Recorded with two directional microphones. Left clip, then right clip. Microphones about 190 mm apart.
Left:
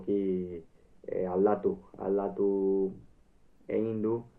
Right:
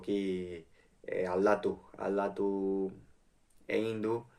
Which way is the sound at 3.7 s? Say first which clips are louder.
Left 2 dB; 15° right (ahead or behind).